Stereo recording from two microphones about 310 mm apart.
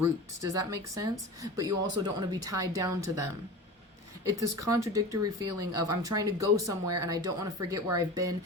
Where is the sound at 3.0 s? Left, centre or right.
Right.